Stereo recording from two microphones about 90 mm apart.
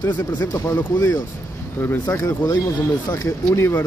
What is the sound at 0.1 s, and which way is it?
Speech, 25° left (ahead or behind).